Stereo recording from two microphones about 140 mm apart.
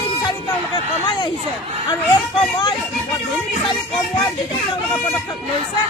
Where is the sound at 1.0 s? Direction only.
35° left (ahead or behind).